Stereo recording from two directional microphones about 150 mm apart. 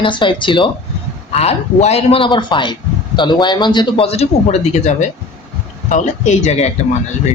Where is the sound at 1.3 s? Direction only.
45° left (ahead or behind).